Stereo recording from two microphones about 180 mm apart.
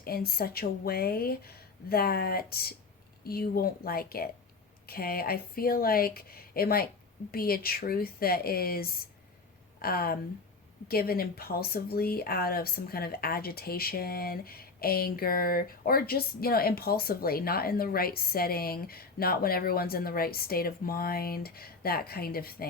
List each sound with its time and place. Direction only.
0.0 s speech: 60° left (ahead or behind)